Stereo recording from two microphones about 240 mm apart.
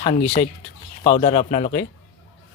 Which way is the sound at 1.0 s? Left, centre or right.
Left.